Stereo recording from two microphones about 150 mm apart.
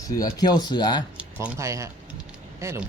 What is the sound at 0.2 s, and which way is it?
Speech, 25° left (ahead or behind).